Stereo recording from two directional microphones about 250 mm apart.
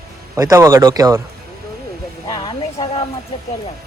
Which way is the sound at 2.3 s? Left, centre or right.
Centre.